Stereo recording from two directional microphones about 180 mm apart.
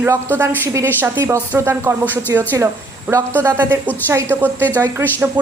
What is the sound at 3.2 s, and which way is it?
Speech, 10° left (ahead or behind).